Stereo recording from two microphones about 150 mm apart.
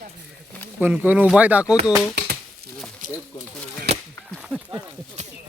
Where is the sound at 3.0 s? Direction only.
65° right (ahead or behind).